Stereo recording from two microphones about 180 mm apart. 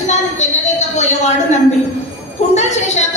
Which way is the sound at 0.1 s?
40° left (ahead or behind).